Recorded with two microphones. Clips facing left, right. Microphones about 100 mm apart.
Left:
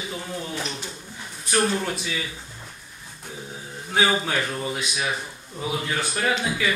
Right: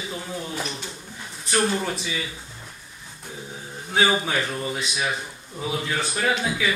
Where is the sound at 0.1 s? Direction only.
Centre (ahead or behind).